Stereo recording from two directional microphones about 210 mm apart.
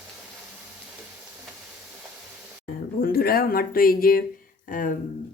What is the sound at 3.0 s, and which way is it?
Speech, 45° left (ahead or behind).